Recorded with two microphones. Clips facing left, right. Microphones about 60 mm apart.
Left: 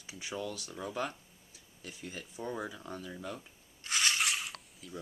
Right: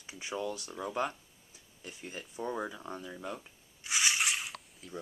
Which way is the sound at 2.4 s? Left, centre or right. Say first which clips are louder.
Right 3 dB; centre.